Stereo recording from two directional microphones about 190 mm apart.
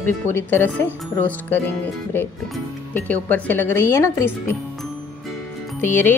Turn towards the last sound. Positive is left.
turn(degrees=10)  # may be behind; listen again after turning